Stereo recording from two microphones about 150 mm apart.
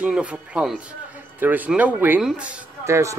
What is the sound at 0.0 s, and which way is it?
A man's voice, 10° right (ahead or behind).